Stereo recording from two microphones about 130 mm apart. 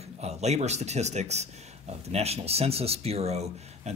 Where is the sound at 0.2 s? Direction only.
55° right (ahead or behind).